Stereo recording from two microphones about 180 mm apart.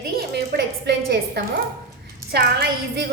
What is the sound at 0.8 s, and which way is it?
A woman's voice, 70° right (ahead or behind).